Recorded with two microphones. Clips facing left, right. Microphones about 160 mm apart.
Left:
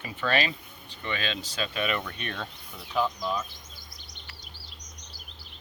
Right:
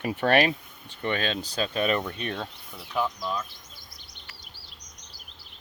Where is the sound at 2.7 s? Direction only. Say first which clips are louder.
Left 1 dB; 5° right (ahead or behind).